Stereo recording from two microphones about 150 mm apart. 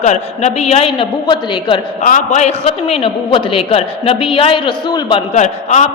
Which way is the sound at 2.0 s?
60° left (ahead or behind).